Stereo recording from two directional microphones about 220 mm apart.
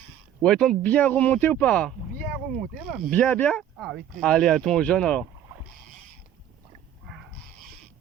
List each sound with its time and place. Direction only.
0.4 s speech: centre (ahead or behind)